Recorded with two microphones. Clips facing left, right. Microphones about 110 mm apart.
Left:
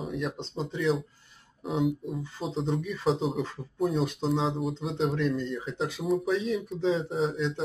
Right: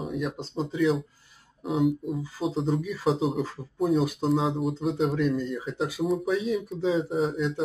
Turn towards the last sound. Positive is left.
turn(degrees=0)  # may be behind; listen again after turning